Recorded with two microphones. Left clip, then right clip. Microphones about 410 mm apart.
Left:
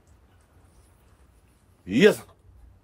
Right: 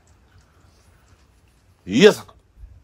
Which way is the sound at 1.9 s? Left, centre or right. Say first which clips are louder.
Right 5 dB; centre.